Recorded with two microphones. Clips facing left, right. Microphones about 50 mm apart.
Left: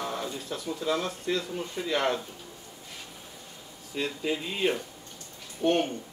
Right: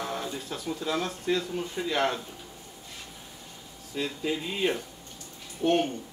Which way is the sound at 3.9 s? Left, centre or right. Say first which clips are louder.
Even; centre.